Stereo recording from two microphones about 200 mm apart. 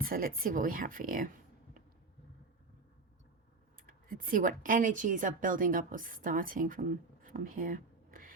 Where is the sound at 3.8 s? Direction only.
45° right (ahead or behind).